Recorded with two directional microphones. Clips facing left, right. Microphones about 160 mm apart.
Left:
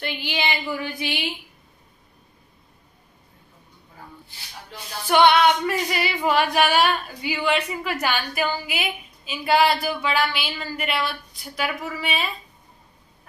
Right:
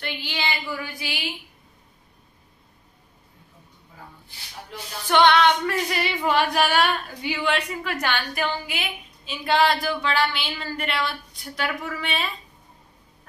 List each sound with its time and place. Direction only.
0.3 s a woman's voice: 20° left (ahead or behind)
5.1 s female singing: 10° left (ahead or behind)